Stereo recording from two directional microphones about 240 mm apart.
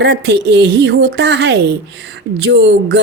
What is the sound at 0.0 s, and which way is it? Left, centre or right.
Speech, right.